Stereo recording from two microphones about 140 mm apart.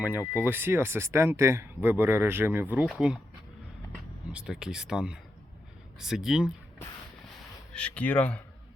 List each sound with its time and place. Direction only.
0.0 s speech: 15° right (ahead or behind)
4.3 s speech: 5° right (ahead or behind)
7.7 s speech: 10° left (ahead or behind)